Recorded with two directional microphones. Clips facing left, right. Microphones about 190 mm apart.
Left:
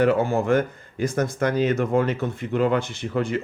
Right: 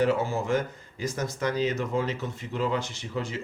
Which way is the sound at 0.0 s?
60° left (ahead or behind).